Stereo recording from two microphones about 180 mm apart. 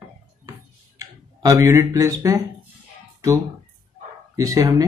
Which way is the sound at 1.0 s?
20° right (ahead or behind).